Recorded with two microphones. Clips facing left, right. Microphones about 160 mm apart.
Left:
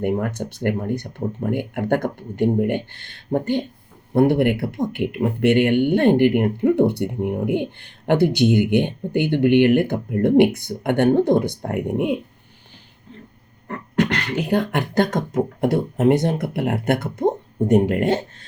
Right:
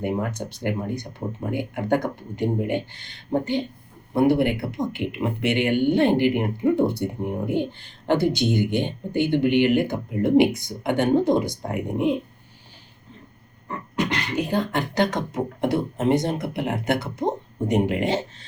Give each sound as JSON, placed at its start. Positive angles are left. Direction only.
{"t": 0.0, "sound": "speech", "side_deg": 55}
{"t": 13.7, "sound": "beatboxing", "side_deg": 60}
{"t": 14.9, "sound": "speech", "side_deg": 50}